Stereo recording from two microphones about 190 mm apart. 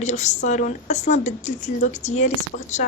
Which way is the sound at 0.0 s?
40° left (ahead or behind).